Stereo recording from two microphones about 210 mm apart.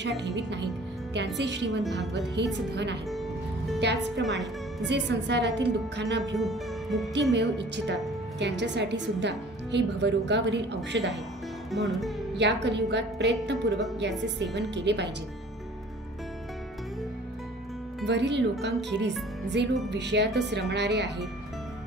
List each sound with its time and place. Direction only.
0.4 s a woman's voice: 55° right (ahead or behind)
1.8 s music: centre (ahead or behind)
2.3 s a woman's voice: 55° right (ahead or behind)
6.3 s speech: centre (ahead or behind)
7.3 s a woman's voice: 55° right (ahead or behind)
11.7 s music: centre (ahead or behind)
12.6 s a woman's voice: 55° right (ahead or behind)
18.0 s a woman's voice: 55° right (ahead or behind)
19.4 s music: 55° right (ahead or behind)
19.9 s a woman's voice: 55° right (ahead or behind)